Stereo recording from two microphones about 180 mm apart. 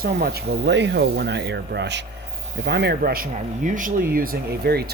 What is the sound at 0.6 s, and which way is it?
Speech, 75° right (ahead or behind).